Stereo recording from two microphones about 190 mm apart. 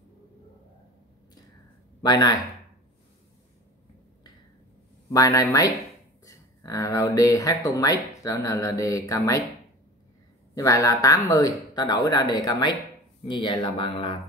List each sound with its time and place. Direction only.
2.0 s speech: 20° left (ahead or behind)
5.1 s speech: 15° left (ahead or behind)
10.5 s speech: 15° left (ahead or behind)